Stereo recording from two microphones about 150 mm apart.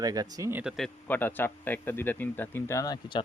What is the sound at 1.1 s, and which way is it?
Speech, 10° left (ahead or behind).